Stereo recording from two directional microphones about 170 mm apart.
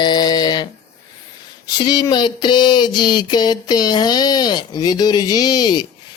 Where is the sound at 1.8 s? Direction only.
25° left (ahead or behind).